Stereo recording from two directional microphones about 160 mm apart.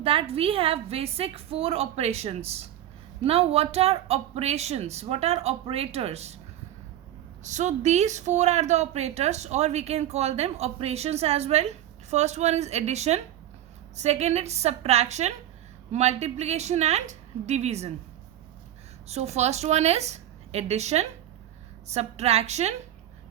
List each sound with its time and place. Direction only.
0.0 s speech: 35° right (ahead or behind)
7.4 s a woman's voice: 50° right (ahead or behind)
19.0 s a woman's voice: 40° right (ahead or behind)